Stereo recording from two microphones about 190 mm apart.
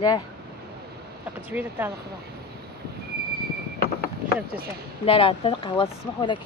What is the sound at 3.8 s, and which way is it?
Vehicle, 55° left (ahead or behind).